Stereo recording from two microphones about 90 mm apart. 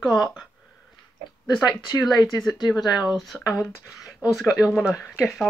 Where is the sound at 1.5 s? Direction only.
50° left (ahead or behind).